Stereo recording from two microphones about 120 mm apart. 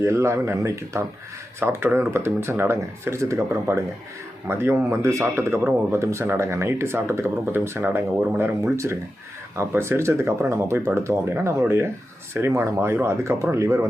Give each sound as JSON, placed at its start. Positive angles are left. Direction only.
{"t": 0.0, "sound": "speech", "side_deg": -25}